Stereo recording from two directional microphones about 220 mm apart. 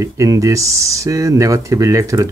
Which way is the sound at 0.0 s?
15° right (ahead or behind).